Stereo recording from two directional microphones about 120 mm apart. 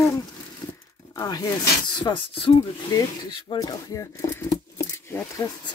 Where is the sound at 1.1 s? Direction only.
30° left (ahead or behind).